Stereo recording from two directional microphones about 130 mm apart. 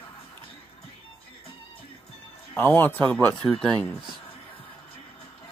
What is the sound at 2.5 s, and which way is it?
Speech, 15° left (ahead or behind).